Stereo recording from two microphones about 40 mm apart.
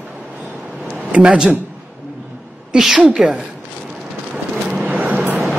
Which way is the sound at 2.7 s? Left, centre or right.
Centre.